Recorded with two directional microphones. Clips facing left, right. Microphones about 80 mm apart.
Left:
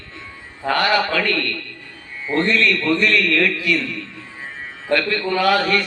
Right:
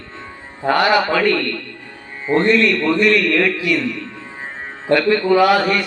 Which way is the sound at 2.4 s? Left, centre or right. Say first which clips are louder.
Right 3 dB; centre.